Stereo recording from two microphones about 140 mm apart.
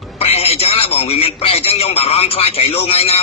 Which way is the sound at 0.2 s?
45° left (ahead or behind).